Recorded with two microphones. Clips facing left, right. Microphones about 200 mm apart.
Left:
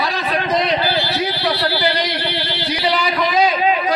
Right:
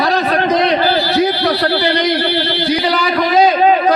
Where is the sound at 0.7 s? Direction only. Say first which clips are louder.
Right 6 dB; 45° right (ahead or behind).